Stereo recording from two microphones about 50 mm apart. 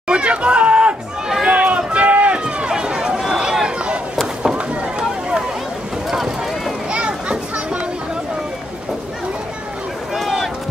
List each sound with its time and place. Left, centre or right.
0.1 s chatter: right
1.5 s run: centre
2.4 s run: centre
6.0 s boat: centre
6.9 s children playing: centre